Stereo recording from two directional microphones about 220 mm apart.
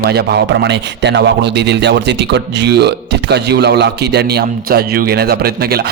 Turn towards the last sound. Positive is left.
turn(degrees=-45)  # may be behind; listen again after turning